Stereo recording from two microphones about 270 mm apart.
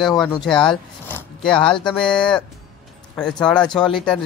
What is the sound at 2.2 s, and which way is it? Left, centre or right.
Speech, centre.